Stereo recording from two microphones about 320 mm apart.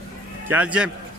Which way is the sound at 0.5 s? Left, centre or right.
Centre.